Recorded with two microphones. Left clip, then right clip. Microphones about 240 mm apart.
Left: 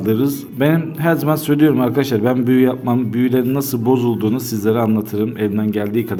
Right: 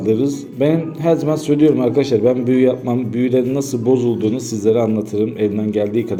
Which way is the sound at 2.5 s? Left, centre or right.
Left.